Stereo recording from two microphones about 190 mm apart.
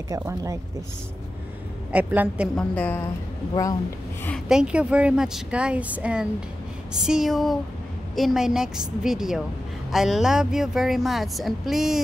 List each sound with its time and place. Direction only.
0.1 s a woman's voice: 15° right (ahead or behind)
1.9 s a woman's voice: 10° right (ahead or behind)
2.5 s a woman's voice: 10° left (ahead or behind)
4.5 s speech: 5° right (ahead or behind)